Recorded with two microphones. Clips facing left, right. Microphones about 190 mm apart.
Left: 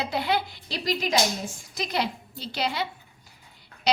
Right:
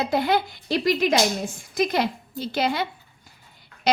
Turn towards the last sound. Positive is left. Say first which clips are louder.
# right 2 dB
turn(degrees=-50)  # may be behind; listen again after turning